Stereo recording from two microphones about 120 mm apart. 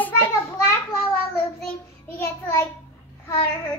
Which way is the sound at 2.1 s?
25° left (ahead or behind).